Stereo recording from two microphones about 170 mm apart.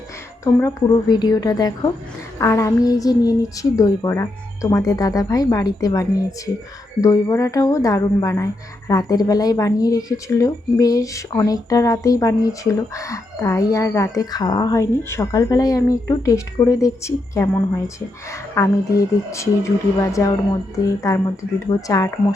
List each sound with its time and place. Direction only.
0.4 s speech: 20° left (ahead or behind)
21.8 s speech: 20° left (ahead or behind)